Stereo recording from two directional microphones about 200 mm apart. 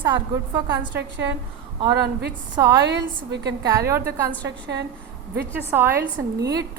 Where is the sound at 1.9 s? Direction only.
55° right (ahead or behind).